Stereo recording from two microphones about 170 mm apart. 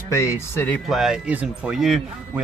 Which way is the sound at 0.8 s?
Centre (ahead or behind).